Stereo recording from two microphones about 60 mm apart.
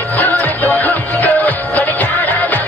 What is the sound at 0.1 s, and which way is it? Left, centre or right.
Music, left.